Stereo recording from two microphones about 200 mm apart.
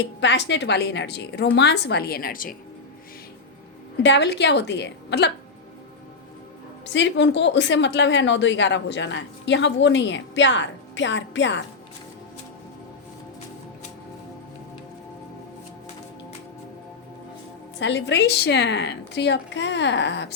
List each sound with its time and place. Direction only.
0.0 s a woman's voice: 60° left (ahead or behind); by 2.6 s 45° left (ahead or behind)
4.0 s a woman's voice: 60° left (ahead or behind)
6.8 s a woman's voice: 60° left (ahead or behind)
17.7 s a woman's voice: 65° left (ahead or behind)